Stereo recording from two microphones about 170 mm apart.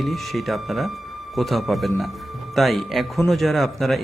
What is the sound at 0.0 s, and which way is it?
Speech, centre (ahead or behind).